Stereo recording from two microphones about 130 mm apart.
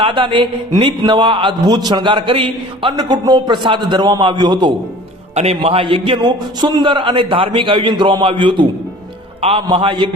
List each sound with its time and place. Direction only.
0.0 s a man's voice: 40° right (ahead or behind)
5.3 s a man's voice: 55° right (ahead or behind)
6.6 s a man's voice: 35° right (ahead or behind)
9.4 s a man's voice: 50° right (ahead or behind)